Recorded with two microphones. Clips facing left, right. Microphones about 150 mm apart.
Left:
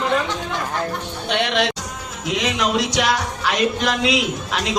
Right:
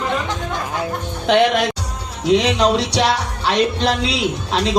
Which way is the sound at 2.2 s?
30° right (ahead or behind).